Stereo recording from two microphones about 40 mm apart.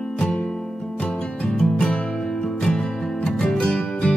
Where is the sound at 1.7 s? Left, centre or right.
Left.